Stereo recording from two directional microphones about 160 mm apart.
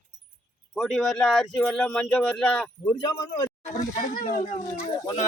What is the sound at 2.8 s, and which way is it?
Speech, 25° left (ahead or behind).